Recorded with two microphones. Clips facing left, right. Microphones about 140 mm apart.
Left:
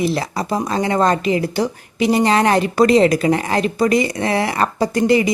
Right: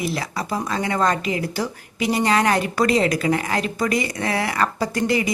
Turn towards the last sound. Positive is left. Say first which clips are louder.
# left 6 dB
turn(degrees=25)  # may be behind; listen again after turning